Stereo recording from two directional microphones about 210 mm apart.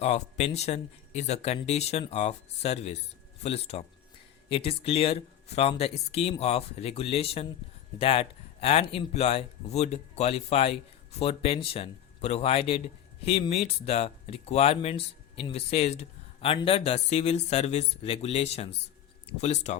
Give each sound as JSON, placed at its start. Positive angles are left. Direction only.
{"t": 0.0, "sound": "speech", "side_deg": 30}